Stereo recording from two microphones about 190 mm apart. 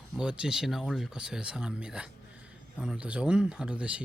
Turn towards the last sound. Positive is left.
turn(degrees=-5)  # may be behind; listen again after turning